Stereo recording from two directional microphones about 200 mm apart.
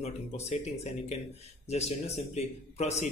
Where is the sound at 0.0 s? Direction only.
30° left (ahead or behind).